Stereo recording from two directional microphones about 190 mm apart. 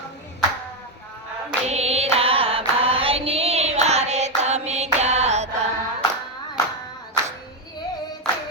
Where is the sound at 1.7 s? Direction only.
35° right (ahead or behind).